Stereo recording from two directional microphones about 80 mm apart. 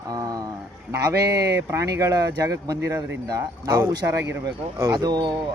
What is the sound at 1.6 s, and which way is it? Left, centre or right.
Speech, right.